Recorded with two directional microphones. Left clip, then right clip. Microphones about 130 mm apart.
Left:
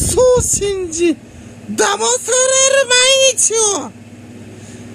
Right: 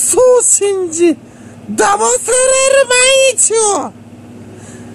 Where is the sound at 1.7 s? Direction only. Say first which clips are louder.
Right 4 dB; 20° left (ahead or behind).